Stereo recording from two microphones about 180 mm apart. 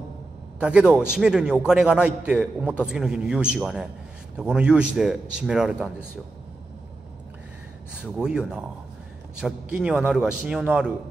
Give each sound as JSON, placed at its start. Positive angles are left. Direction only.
{"t": 0.6, "sound": "a man's voice", "side_deg": -5}
{"t": 8.0, "sound": "a man's voice", "side_deg": -5}